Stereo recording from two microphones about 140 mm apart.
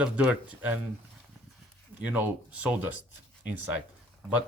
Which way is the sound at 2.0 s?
10° right (ahead or behind).